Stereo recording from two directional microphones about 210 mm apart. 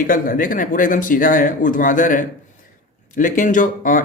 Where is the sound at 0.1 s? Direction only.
40° left (ahead or behind).